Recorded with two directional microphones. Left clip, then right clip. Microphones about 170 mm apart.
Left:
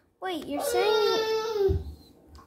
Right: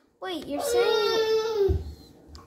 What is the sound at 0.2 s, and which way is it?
Speech, 10° left (ahead or behind).